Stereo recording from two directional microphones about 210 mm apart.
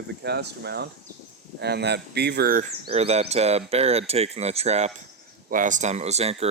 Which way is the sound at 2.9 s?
30° right (ahead or behind).